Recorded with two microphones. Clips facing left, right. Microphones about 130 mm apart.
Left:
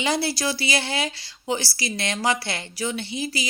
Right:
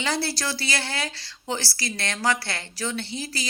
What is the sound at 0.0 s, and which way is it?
A woman's voice, 15° left (ahead or behind).